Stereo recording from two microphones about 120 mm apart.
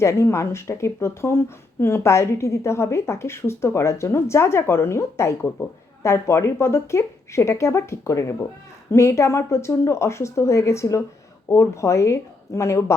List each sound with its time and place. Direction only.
0.0 s speech: 25° left (ahead or behind)